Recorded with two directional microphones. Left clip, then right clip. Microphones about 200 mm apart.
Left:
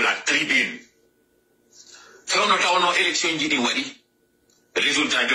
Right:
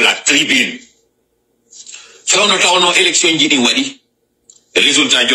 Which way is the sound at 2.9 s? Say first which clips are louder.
Right 9 dB; 70° right (ahead or behind).